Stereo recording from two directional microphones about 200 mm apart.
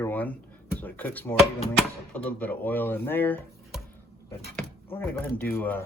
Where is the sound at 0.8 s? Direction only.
10° left (ahead or behind).